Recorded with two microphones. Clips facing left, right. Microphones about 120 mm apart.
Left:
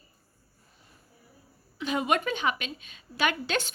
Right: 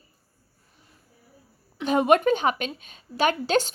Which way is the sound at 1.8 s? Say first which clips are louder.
Right 8 dB; 45° right (ahead or behind).